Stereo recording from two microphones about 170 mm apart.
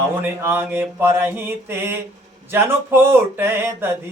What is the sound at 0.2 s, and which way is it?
Speech, 10° right (ahead or behind).